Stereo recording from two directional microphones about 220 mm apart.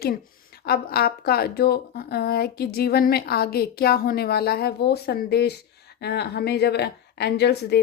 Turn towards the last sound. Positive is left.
turn(degrees=50)  # may be behind; listen again after turning